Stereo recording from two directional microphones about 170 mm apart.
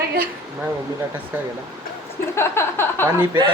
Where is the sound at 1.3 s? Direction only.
10° right (ahead or behind).